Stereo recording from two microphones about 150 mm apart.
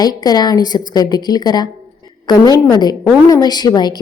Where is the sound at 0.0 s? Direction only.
25° left (ahead or behind).